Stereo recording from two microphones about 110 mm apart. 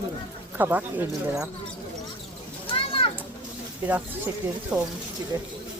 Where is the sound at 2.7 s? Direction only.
55° left (ahead or behind).